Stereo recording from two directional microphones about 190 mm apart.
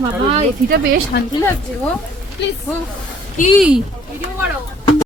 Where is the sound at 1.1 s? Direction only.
65° left (ahead or behind).